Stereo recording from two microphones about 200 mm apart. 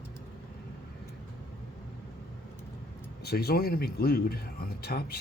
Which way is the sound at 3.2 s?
50° left (ahead or behind).